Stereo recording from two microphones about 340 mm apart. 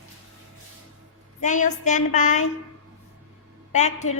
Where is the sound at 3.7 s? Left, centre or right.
Centre.